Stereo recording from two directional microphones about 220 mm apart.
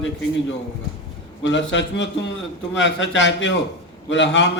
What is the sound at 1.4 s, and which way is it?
A man's voice, 55° left (ahead or behind).